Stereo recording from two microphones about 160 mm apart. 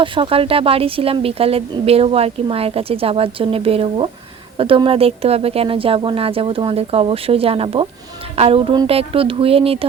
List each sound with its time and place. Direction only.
0.0 s speech: 30° right (ahead or behind)